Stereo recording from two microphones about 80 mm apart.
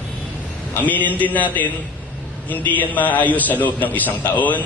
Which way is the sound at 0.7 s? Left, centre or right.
Left.